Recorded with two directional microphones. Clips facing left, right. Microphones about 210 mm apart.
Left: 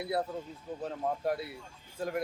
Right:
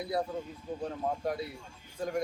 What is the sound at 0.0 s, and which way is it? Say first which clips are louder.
Speech: even; 5° left (ahead or behind).